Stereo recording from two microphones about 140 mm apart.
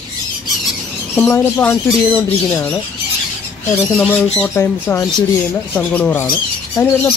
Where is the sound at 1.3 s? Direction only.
15° left (ahead or behind).